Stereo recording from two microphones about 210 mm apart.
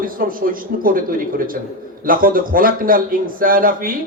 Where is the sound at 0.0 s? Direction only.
40° right (ahead or behind).